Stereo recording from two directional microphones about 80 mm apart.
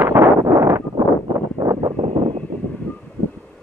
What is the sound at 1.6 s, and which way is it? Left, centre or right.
Wind noise, right.